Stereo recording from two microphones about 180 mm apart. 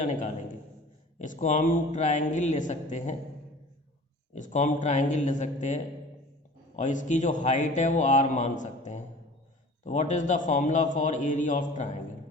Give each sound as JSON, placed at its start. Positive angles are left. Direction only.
{"t": 1.2, "sound": "a man's voice", "side_deg": 45}
{"t": 4.4, "sound": "a man's voice", "side_deg": 45}